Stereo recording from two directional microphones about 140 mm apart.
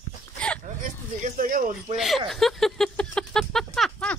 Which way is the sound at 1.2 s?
90° right.